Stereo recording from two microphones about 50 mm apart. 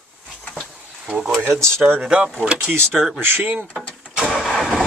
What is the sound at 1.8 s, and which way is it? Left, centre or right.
Speech, right.